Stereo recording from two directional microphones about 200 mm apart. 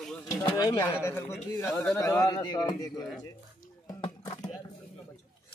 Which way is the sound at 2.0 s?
15° left (ahead or behind).